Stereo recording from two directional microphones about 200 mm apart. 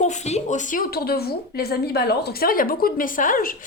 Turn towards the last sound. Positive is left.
turn(degrees=45)  # may be behind; listen again after turning